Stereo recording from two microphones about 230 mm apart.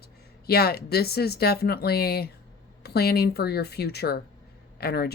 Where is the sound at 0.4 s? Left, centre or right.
Left.